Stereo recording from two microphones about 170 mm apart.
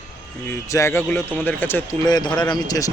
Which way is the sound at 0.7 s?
15° left (ahead or behind).